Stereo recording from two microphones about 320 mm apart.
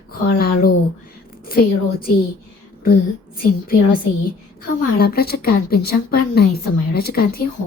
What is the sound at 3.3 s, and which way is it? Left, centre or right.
A woman's voice, left.